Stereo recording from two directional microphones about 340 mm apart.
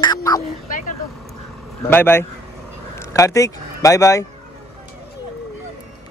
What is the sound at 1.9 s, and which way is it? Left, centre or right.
Speech, centre.